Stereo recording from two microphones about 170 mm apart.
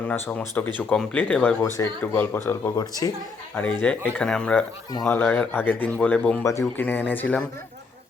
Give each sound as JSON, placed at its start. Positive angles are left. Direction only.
{"t": 0.1, "sound": "speech", "side_deg": 10}
{"t": 3.5, "sound": "speech", "side_deg": 10}